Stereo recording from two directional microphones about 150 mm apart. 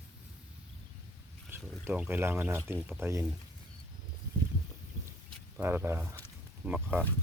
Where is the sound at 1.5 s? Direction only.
15° right (ahead or behind).